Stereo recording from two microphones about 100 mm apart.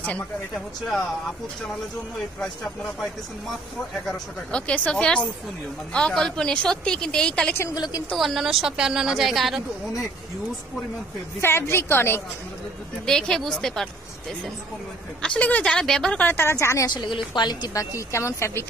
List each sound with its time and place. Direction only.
2.4 s a woman's voice: 5° left (ahead or behind)
7.7 s a woman's voice: 45° left (ahead or behind)
8.2 s a woman's voice: centre (ahead or behind)
11.4 s a woman's voice: 25° left (ahead or behind)
13.0 s a woman's voice: 5° left (ahead or behind)
15.2 s a woman's voice: 15° left (ahead or behind); by 16.9 s 30° left (ahead or behind)
16.9 s a woman's voice: 50° left (ahead or behind); by 18.7 s 25° left (ahead or behind)